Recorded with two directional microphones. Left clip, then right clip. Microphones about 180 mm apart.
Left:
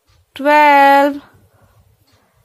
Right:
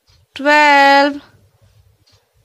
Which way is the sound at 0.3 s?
5° right (ahead or behind).